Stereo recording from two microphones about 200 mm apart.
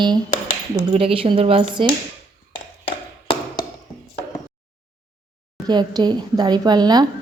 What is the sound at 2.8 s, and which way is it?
Tap, 25° left (ahead or behind).